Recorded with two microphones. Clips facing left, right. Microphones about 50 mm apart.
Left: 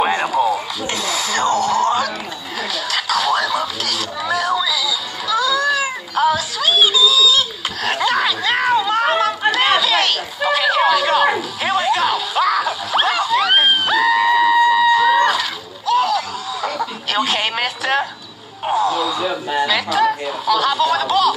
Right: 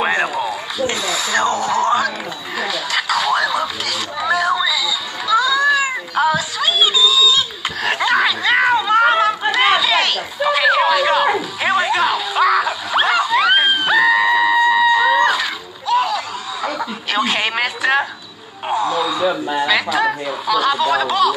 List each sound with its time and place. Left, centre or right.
0.0 s a sound: centre
0.7 s speech: centre
2.6 s a sound: centre
15.9 s snicker: centre
18.8 s music: centre
19.7 s speech: centre